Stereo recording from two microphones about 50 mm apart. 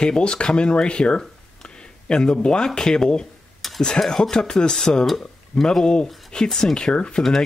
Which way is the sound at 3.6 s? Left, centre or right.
Centre.